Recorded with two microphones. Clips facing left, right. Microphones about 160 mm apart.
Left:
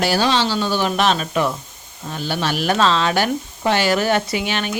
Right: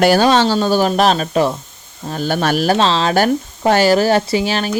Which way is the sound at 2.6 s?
30° right (ahead or behind).